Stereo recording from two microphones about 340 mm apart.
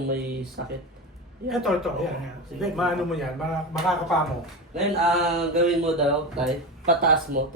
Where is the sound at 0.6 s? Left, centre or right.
Right.